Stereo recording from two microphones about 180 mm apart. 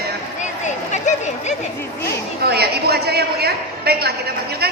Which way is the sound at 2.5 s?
60° right (ahead or behind).